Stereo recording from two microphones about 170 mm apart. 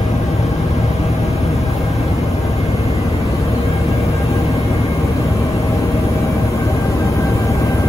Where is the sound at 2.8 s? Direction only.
40° left (ahead or behind).